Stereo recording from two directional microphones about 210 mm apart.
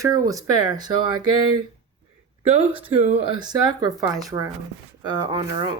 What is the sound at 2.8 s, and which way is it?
Speech, 30° right (ahead or behind).